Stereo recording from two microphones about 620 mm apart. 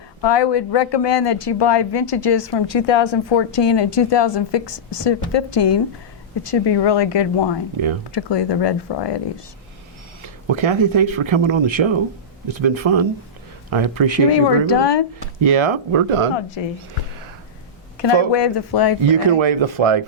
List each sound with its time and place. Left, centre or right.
0.2 s speech: left
10.4 s speech: right
14.3 s speech: left
15.4 s speech: right
18.3 s speech: left
19.0 s speech: right